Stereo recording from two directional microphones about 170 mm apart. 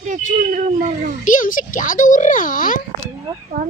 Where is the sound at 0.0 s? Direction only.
50° right (ahead or behind).